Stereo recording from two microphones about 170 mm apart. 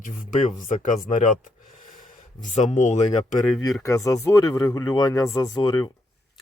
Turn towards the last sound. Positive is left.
turn(degrees=20)  # may be behind; listen again after turning